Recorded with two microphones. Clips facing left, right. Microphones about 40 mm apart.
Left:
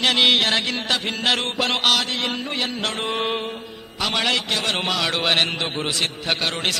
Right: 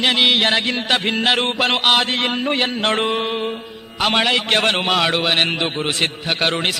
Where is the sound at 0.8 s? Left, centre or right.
Right.